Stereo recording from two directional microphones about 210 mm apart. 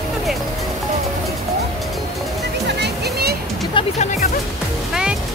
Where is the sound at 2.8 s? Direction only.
50° right (ahead or behind).